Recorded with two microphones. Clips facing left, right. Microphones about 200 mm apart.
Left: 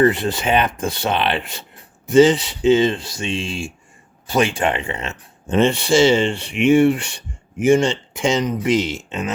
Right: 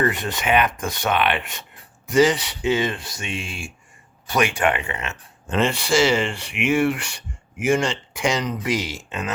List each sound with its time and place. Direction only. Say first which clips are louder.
0.0 s speech: left 6 dB; 30° left (ahead or behind)